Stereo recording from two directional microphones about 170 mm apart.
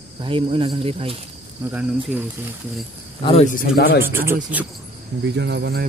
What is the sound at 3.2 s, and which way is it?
Speech, 35° left (ahead or behind).